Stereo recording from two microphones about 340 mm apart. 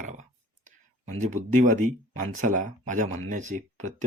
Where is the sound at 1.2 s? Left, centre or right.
Right.